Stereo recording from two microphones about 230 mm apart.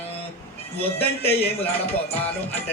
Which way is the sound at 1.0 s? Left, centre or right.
Left.